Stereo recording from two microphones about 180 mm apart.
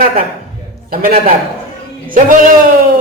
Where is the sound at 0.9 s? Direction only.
55° right (ahead or behind).